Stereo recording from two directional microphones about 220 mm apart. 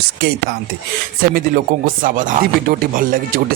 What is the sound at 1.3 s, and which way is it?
Speech, 40° right (ahead or behind).